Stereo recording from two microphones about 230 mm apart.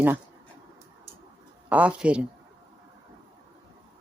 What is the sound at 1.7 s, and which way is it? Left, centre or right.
Speech, centre.